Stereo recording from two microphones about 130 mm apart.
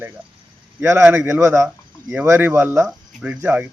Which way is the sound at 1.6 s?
10° right (ahead or behind).